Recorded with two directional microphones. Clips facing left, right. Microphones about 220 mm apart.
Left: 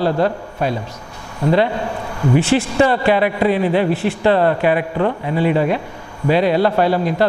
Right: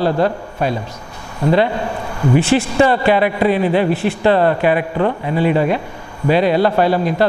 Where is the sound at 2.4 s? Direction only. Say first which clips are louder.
Right 1 dB; 10° right (ahead or behind).